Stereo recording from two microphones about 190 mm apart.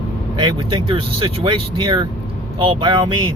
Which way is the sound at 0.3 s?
25° right (ahead or behind).